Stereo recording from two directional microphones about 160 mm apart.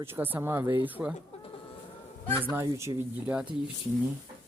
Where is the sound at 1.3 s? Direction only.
40° left (ahead or behind).